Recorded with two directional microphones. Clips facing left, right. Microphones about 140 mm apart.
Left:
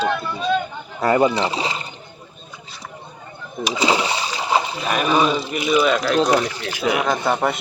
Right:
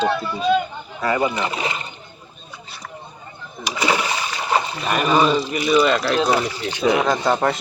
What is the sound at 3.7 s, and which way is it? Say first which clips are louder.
Splash: left 1 dB; 20° left (ahead or behind).